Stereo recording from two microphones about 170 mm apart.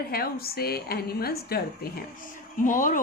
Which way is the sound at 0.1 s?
65° left (ahead or behind).